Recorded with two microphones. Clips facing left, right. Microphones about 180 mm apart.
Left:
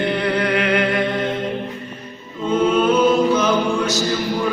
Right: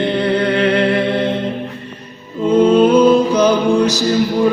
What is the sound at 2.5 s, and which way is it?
Music, 35° right (ahead or behind).